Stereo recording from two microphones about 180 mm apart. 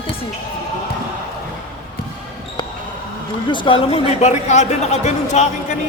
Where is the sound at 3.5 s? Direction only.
30° left (ahead or behind).